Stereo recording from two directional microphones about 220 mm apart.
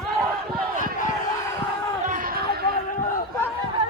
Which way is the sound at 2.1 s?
40° right (ahead or behind).